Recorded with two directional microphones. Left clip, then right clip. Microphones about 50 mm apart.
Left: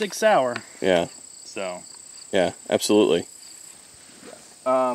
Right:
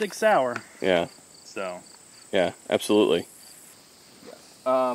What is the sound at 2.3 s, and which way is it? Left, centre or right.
Speech, left.